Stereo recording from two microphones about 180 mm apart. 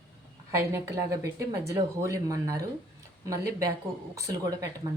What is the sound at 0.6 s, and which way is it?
Speech, 15° right (ahead or behind).